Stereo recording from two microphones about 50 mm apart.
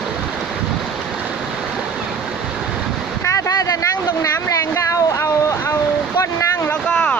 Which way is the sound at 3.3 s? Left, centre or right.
Left.